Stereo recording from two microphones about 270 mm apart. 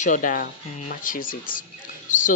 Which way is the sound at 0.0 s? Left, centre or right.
Left.